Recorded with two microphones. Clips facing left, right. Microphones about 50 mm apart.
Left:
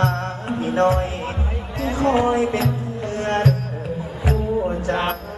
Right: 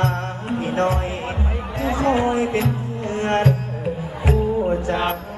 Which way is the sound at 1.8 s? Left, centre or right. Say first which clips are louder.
Left 1 dB; right.